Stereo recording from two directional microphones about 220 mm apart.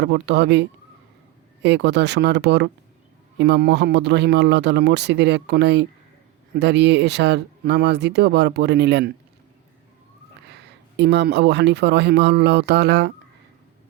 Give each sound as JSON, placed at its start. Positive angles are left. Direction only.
{"t": 0.0, "sound": "speech", "side_deg": -50}
{"t": 10.5, "sound": "speech", "side_deg": -50}